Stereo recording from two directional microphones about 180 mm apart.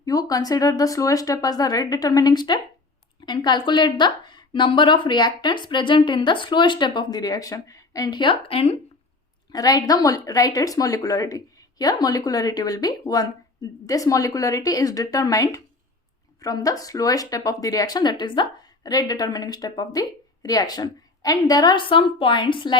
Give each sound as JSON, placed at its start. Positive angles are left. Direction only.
{"t": 0.0, "sound": "a woman's voice", "side_deg": 20}
{"t": 9.5, "sound": "speech", "side_deg": 20}